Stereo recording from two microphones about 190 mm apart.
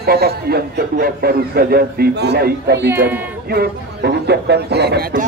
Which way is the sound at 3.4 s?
55° right (ahead or behind).